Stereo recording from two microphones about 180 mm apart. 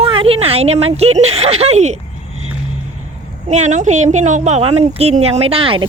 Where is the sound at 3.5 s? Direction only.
40° right (ahead or behind).